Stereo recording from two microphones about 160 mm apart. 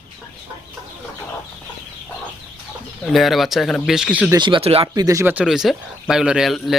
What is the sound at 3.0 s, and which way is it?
Speech, centre (ahead or behind).